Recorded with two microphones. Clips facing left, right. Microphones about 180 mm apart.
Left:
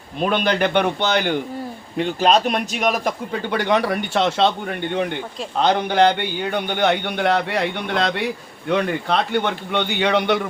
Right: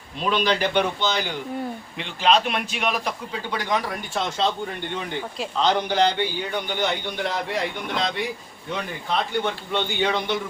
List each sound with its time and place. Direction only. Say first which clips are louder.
0.2 s a man's voice: left 3 dB; 55° left (ahead or behind)
2.0 s speech: left 4 dB; 40° left (ahead or behind)
3.5 s a man's voice: left 7 dB; 65° left (ahead or behind)
5.5 s a man's voice: left 4 dB; 60° left (ahead or behind)